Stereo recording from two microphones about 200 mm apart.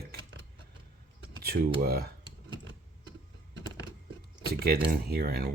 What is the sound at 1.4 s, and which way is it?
Speech, 50° right (ahead or behind).